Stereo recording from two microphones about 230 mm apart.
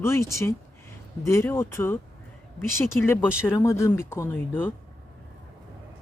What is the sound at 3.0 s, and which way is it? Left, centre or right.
Speech, centre.